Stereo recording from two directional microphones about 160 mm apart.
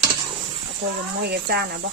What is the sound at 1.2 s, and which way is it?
Speech, 85° right.